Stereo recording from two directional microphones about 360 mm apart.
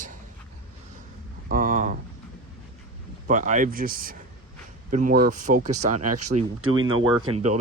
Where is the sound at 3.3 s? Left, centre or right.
Right.